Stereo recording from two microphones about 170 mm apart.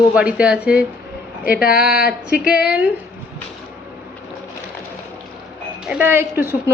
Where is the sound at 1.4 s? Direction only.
60° left (ahead or behind).